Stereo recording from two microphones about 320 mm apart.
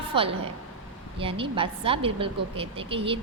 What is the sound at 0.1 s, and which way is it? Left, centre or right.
A woman's voice, centre.